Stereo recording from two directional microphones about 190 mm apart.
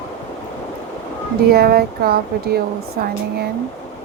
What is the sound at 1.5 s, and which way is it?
Speech, 55° right (ahead or behind).